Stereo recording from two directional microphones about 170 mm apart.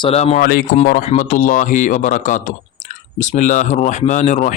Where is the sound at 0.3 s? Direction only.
60° left (ahead or behind).